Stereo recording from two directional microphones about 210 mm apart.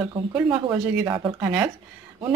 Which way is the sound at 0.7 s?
10° right (ahead or behind).